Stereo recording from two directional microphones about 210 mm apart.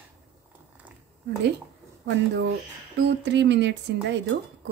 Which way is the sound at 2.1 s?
55° right (ahead or behind).